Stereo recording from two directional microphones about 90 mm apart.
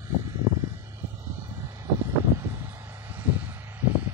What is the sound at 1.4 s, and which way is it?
Vehicle, 35° right (ahead or behind).